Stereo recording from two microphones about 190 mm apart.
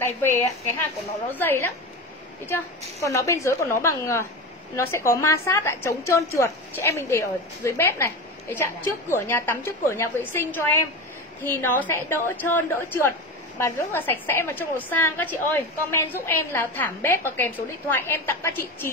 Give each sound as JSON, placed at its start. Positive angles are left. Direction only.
{"t": 0.0, "sound": "a woman's voice", "side_deg": 10}
{"t": 3.0, "sound": "a woman's voice", "side_deg": 15}